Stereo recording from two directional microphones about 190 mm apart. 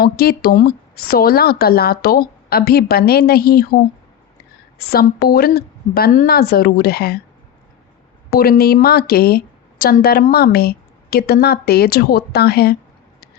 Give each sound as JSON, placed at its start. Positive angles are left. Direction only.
{"t": 0.0, "sound": "speech", "side_deg": 55}
{"t": 4.9, "sound": "a woman's voice", "side_deg": 55}
{"t": 8.3, "sound": "a woman's voice", "side_deg": 55}